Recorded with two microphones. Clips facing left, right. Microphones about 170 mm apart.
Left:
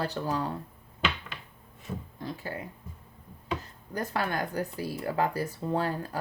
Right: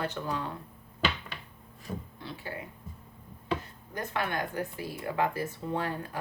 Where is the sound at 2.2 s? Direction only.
40° left (ahead or behind).